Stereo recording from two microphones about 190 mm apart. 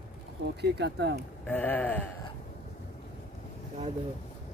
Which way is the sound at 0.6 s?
65° right (ahead or behind).